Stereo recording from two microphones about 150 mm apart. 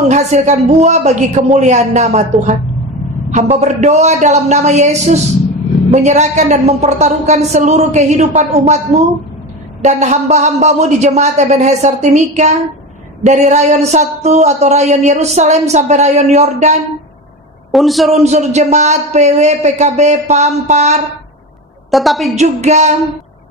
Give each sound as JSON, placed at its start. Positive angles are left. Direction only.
{"t": 0.1, "sound": "a woman's voice", "side_deg": -50}
{"t": 3.6, "sound": "a woman's voice", "side_deg": -50}
{"t": 17.6, "sound": "speech", "side_deg": 0}
{"t": 18.1, "sound": "a woman's voice", "side_deg": -45}
{"t": 21.9, "sound": "a woman's voice", "side_deg": 0}
{"t": 22.3, "sound": "a woman's voice", "side_deg": -50}